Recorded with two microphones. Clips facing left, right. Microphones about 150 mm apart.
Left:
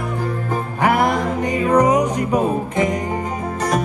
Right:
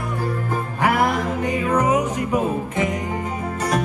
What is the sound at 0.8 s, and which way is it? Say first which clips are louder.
Music: left 2 dB; 15° left (ahead or behind).